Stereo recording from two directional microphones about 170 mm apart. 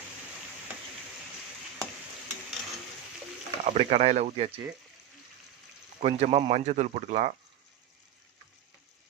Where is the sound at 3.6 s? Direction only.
35° right (ahead or behind).